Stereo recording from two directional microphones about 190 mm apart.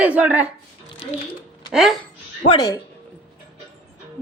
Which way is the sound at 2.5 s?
20° left (ahead or behind).